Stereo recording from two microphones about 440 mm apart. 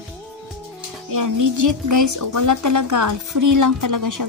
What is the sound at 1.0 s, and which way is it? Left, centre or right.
A woman's voice, right.